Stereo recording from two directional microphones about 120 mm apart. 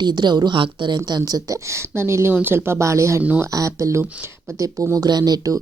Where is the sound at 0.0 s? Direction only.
40° right (ahead or behind).